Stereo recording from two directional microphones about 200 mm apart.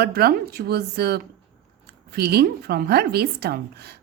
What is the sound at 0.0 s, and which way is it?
Speech, 50° right (ahead or behind).